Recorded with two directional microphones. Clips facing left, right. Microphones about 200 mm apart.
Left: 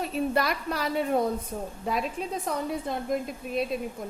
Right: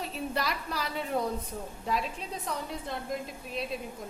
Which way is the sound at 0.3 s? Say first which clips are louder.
Left 6 dB; 55° left (ahead or behind).